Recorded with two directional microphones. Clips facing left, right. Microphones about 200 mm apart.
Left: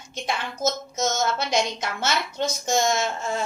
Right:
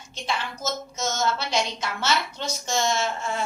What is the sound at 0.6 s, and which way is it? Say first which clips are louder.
A woman's voice: left 4 dB; 20° left (ahead or behind).